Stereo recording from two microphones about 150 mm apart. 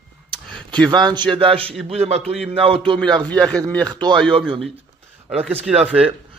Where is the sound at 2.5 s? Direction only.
40° right (ahead or behind).